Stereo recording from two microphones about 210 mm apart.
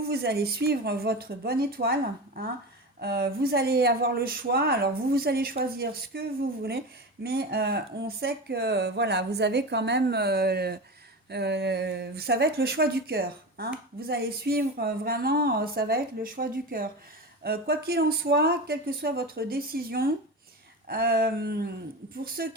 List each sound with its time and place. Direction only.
0.1 s speech: 50° right (ahead or behind)